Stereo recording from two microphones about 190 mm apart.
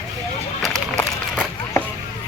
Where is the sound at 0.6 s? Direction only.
5° left (ahead or behind).